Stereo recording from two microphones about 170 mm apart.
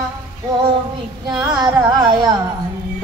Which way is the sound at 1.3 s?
20° right (ahead or behind).